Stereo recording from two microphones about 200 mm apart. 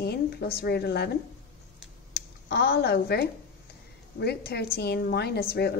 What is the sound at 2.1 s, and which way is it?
A woman's voice, 50° left (ahead or behind).